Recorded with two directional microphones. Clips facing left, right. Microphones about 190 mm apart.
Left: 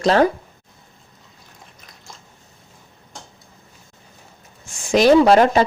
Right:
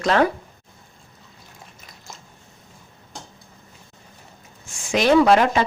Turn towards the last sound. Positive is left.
turn(degrees=40)  # may be behind; listen again after turning